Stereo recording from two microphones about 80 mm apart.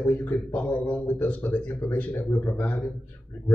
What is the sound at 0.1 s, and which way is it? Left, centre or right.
A man's voice, left.